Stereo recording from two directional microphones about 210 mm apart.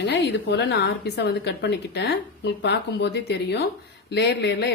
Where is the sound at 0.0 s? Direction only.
55° left (ahead or behind).